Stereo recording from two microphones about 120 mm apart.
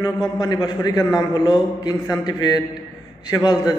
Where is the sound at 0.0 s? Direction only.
35° left (ahead or behind).